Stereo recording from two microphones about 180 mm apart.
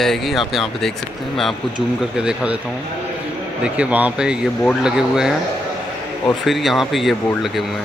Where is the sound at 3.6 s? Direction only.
5° right (ahead or behind).